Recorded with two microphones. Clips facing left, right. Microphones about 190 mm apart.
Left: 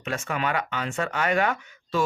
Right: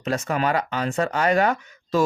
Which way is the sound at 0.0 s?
40° right (ahead or behind).